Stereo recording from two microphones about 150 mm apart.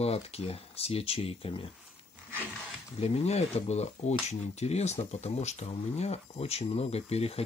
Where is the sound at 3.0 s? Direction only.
45° left (ahead or behind).